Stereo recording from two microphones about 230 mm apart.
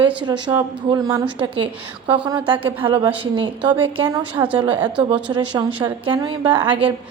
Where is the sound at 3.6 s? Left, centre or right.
Centre.